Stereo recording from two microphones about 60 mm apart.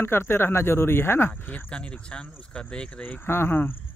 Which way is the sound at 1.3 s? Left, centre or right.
Left.